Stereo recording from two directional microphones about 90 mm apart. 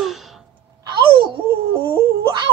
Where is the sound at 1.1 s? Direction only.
65° right (ahead or behind).